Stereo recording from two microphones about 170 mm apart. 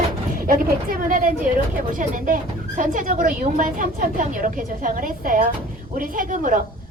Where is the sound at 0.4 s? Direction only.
55° right (ahead or behind).